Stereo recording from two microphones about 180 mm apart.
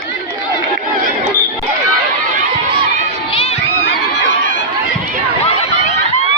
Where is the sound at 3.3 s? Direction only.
30° left (ahead or behind).